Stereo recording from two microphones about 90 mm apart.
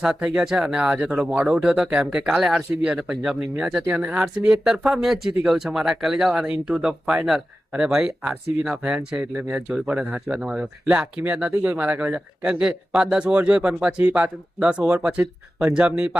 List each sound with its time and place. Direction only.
0.0 s speech: 10° right (ahead or behind)